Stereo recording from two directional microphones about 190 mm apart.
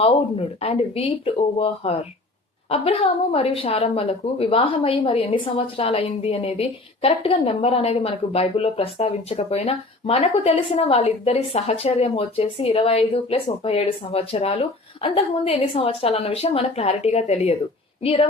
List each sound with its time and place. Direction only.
0.0 s a woman's voice: 30° left (ahead or behind)